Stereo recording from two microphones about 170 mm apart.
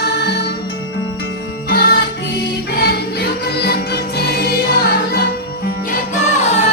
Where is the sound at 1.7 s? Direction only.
65° left (ahead or behind).